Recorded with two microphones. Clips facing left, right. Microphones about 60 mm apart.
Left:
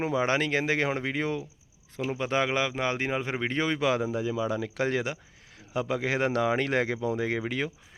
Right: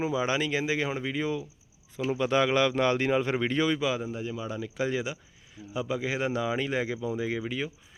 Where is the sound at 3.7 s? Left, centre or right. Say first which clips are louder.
Left 3 dB; left.